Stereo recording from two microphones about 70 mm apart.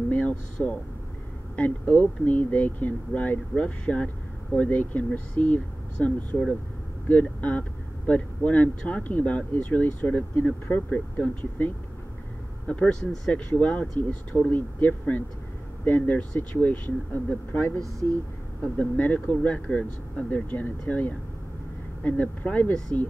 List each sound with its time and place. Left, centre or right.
0.1 s speech: centre
17.7 s speech: right
18.8 s speech: left
22.0 s speech: left